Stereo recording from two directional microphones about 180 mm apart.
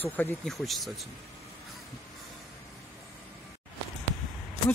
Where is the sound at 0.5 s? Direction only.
Centre (ahead or behind).